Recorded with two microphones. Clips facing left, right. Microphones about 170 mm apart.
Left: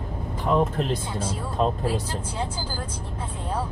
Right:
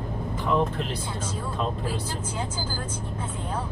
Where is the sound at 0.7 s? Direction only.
40° left (ahead or behind).